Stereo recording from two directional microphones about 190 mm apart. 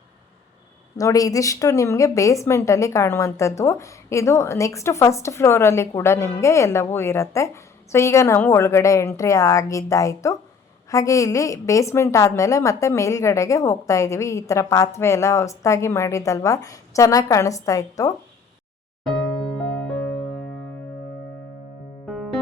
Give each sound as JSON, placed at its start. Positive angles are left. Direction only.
{"t": 0.9, "sound": "a woman's voice", "side_deg": 20}
{"t": 22.1, "sound": "music", "side_deg": 0}